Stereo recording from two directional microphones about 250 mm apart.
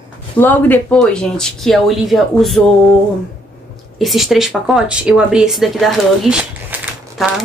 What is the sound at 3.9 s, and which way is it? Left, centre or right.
Speech, centre.